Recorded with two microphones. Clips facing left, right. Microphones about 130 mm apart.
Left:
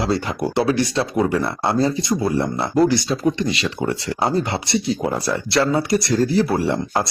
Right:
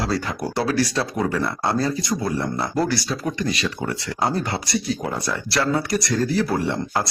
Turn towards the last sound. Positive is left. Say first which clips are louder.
# left 3 dB
turn(degrees=30)  # may be behind; listen again after turning